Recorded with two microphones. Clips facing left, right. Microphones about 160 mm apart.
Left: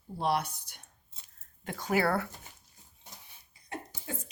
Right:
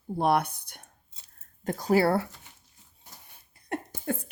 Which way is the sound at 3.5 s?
55° right (ahead or behind).